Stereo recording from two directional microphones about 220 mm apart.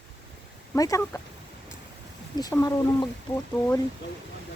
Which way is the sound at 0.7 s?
15° left (ahead or behind).